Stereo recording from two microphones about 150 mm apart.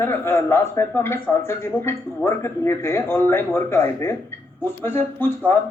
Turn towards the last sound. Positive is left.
turn(degrees=15)  # may be behind; listen again after turning